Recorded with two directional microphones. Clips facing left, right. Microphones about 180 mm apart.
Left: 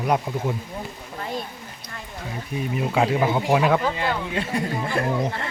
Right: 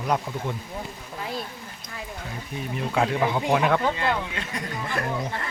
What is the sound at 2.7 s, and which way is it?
Speech, 10° left (ahead or behind).